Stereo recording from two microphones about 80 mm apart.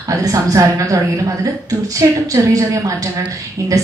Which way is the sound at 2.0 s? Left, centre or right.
Right.